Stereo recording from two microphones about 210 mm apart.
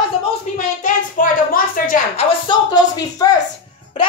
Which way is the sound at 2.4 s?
20° left (ahead or behind).